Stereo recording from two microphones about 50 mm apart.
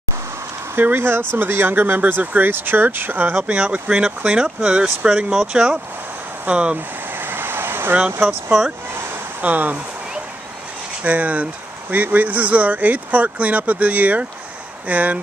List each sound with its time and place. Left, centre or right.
0.9 s speech: right
3.4 s speech: right
7.1 s vehicle: right
9.4 s speech: right
11.0 s speech: right